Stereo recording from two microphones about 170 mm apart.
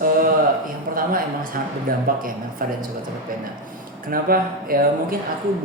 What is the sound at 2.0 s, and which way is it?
Speech, 55° right (ahead or behind).